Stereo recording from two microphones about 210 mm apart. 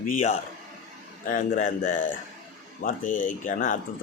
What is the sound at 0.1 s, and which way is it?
A man's voice, 35° left (ahead or behind).